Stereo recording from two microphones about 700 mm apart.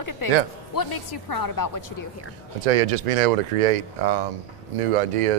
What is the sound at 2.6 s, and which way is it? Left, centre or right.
Speech, right.